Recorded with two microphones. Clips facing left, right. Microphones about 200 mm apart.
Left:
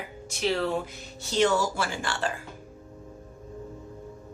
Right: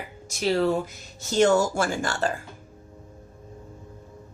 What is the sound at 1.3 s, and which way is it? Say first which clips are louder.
Speech: right 4 dB; 45° right (ahead or behind).